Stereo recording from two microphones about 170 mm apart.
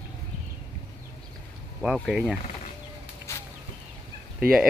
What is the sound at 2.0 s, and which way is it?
Speech, centre (ahead or behind).